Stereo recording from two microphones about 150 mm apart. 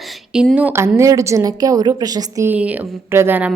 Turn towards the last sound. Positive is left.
turn(degrees=-15)  # may be behind; listen again after turning